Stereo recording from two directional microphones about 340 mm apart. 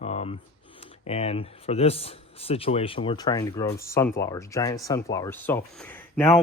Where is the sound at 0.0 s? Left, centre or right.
Centre.